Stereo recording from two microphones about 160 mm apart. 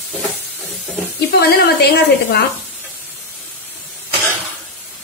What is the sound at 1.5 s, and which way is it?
Speech, 85° left.